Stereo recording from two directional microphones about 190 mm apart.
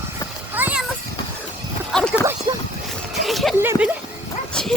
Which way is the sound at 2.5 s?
25° right (ahead or behind).